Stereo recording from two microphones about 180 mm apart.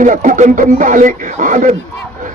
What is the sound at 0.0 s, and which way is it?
Speech, 45° right (ahead or behind).